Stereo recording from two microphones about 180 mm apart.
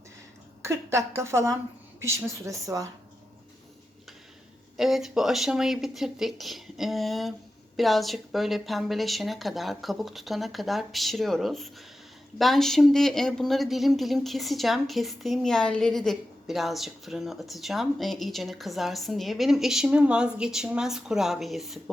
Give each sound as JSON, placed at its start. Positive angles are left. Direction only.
{"t": 0.6, "sound": "a woman's voice", "side_deg": -15}
{"t": 4.8, "sound": "speech", "side_deg": 0}